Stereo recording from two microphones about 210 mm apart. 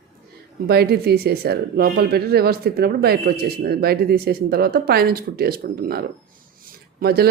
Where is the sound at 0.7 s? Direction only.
50° right (ahead or behind).